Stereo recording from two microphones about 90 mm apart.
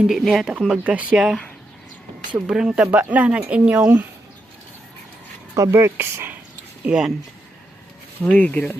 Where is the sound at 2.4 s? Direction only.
10° right (ahead or behind).